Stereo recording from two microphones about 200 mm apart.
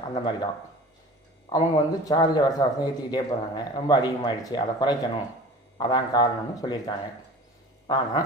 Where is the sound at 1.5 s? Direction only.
20° left (ahead or behind).